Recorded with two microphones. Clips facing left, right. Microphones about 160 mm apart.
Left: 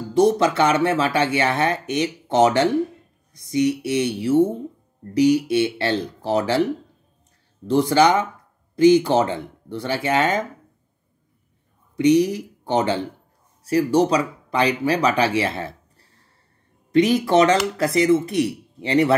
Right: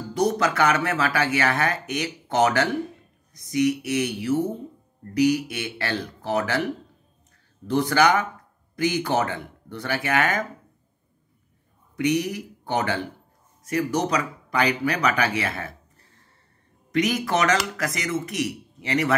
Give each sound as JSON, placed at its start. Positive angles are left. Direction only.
{"t": 0.1, "sound": "speech", "side_deg": 25}
{"t": 12.0, "sound": "speech", "side_deg": 25}